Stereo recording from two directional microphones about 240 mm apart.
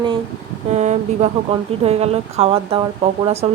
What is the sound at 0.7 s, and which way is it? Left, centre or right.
Speech, right.